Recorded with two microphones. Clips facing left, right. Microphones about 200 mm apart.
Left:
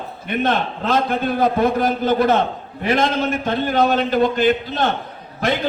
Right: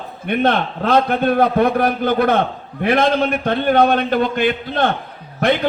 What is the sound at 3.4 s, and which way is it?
Speech, 55° right (ahead or behind).